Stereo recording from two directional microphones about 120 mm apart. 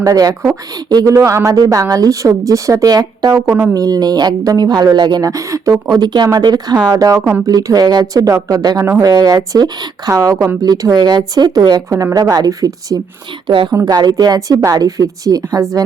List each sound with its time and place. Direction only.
0.0 s speech: 30° right (ahead or behind)
3.4 s speech: 20° right (ahead or behind)
3.8 s speech: 30° right (ahead or behind)
13.5 s a woman's voice: 45° right (ahead or behind)